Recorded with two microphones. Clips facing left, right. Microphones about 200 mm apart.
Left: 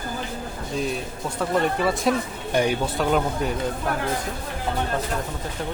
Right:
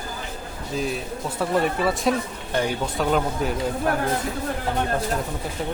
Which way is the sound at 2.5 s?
15° left (ahead or behind).